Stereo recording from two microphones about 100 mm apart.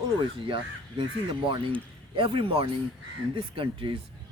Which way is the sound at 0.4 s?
55° right (ahead or behind).